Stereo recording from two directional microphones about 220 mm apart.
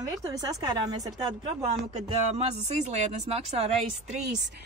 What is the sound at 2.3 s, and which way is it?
Speech, 30° right (ahead or behind).